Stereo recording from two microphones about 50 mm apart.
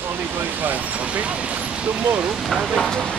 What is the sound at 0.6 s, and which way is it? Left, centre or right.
Speech, right.